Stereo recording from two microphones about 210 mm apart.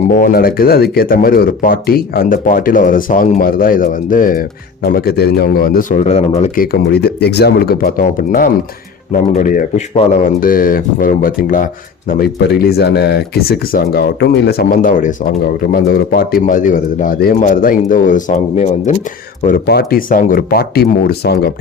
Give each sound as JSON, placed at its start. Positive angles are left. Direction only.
{"t": 0.1, "sound": "speech", "side_deg": 45}
{"t": 6.4, "sound": "a man's voice", "side_deg": 45}
{"t": 19.5, "sound": "speech", "side_deg": 45}